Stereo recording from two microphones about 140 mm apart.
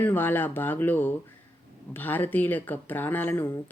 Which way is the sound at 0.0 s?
15° left (ahead or behind).